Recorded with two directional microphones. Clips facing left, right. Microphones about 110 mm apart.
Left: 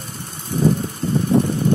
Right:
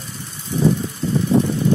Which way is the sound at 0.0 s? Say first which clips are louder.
Left 1 dB; 50° left (ahead or behind).